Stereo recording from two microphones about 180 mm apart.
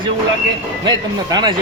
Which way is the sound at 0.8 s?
25° right (ahead or behind).